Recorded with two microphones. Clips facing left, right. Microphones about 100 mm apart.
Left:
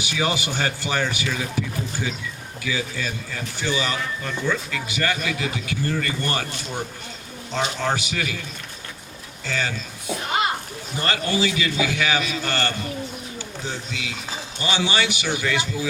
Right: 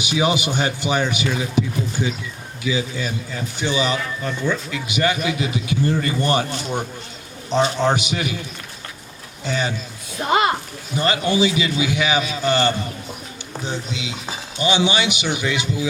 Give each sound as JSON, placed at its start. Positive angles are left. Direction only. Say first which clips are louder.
{"t": 0.0, "sound": "speech", "louder": "right 5 dB", "side_deg": -20}
{"t": 7.8, "sound": "speech", "louder": "right 5 dB", "side_deg": -20}
{"t": 9.4, "sound": "speech", "louder": "right 4 dB", "side_deg": -20}
{"t": 10.9, "sound": "speech", "louder": "right 5 dB", "side_deg": -20}